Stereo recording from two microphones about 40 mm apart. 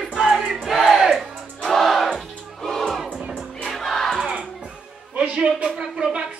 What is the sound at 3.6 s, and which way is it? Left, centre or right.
Music, centre.